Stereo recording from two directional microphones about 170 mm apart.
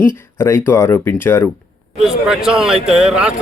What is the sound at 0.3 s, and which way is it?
Speech, 15° left (ahead or behind).